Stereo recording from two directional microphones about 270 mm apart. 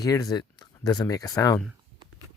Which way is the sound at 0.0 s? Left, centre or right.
Centre.